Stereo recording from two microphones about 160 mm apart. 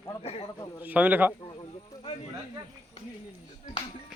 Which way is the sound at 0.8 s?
10° right (ahead or behind).